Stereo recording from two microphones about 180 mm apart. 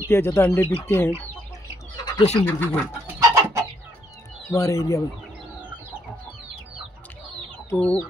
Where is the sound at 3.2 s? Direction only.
15° right (ahead or behind).